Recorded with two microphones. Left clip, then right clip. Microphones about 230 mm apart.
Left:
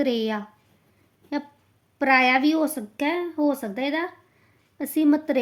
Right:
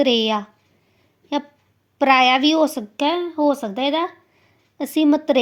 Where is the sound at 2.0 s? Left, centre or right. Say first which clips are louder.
Right 4 dB; centre.